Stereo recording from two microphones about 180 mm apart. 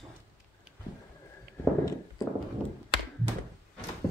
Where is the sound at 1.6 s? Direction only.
20° left (ahead or behind).